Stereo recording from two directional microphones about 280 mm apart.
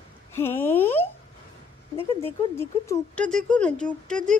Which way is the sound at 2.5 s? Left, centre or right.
Centre.